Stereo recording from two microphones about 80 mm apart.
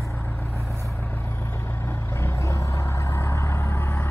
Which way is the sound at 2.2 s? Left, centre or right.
Left.